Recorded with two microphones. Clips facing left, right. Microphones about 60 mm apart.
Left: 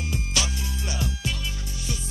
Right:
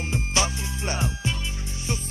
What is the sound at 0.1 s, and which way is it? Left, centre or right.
Music, right.